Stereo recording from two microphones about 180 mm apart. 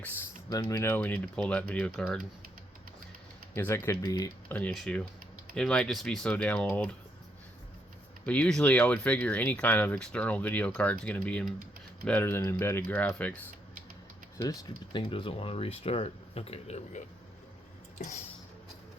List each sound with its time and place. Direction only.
0.5 s speech: 15° left (ahead or behind)
3.5 s speech: 15° left (ahead or behind)
4.5 s speech: 5° left (ahead or behind)
8.2 s speech: 5° left (ahead or behind)
14.4 s speech: 25° left (ahead or behind)
17.9 s a sound: 45° left (ahead or behind)